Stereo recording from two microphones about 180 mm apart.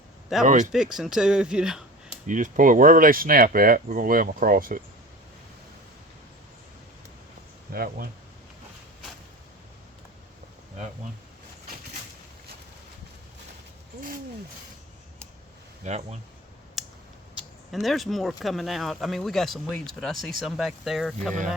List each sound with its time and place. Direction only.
0.4 s speech: 45° right (ahead or behind)
0.7 s speech: 5° right (ahead or behind)
2.2 s speech: 45° right (ahead or behind)
7.7 s speech: 55° right (ahead or behind)
15.8 s speech: 40° right (ahead or behind)
16.8 s a sound: centre (ahead or behind)
17.7 s speech: centre (ahead or behind)